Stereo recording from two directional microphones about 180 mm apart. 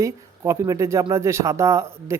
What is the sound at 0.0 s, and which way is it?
Speech, 15° right (ahead or behind).